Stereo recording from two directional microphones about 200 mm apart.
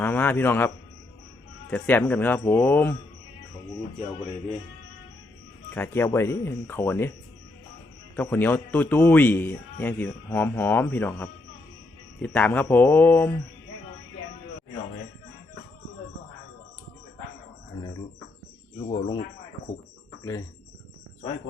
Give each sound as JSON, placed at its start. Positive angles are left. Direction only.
{"t": 0.0, "sound": "a man's voice", "side_deg": 10}
{"t": 1.7, "sound": "a man's voice", "side_deg": 10}
{"t": 5.7, "sound": "a man's voice", "side_deg": 10}
{"t": 8.1, "sound": "a man's voice", "side_deg": 10}
{"t": 18.9, "sound": "speech", "side_deg": 25}